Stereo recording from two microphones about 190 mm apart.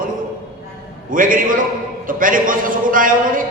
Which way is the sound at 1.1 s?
45° right (ahead or behind).